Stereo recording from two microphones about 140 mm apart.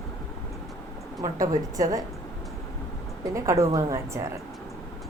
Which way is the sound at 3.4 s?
20° right (ahead or behind).